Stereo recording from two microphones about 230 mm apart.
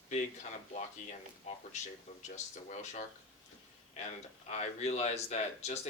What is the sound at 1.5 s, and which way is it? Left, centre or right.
Speech, left.